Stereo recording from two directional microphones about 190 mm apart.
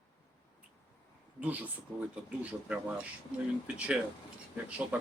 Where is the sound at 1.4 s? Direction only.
10° right (ahead or behind).